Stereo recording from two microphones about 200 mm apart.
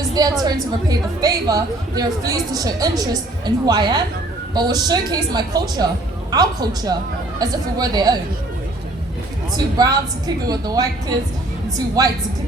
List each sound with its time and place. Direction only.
0.0 s a sound: 20° right (ahead or behind)
0.4 s a woman's voice: 20° right (ahead or behind)
9.6 s a woman's voice: 20° right (ahead or behind)
12.0 s a woman's voice: 20° right (ahead or behind)